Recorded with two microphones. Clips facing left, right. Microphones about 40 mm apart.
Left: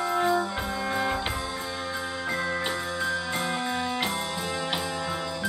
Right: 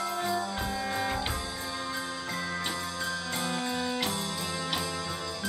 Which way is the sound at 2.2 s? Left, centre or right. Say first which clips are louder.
Left 8 dB; centre.